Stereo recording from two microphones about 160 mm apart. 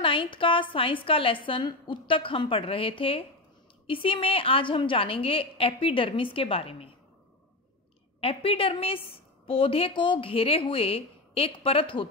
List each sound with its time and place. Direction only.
0.0 s a woman's voice: 30° left (ahead or behind)
8.2 s a woman's voice: 35° left (ahead or behind)